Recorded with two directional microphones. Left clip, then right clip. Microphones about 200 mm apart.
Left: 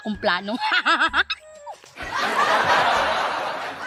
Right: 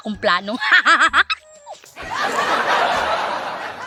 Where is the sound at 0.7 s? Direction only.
5° right (ahead or behind).